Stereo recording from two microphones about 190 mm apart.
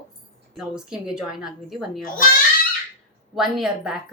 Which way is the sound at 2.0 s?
45° left (ahead or behind).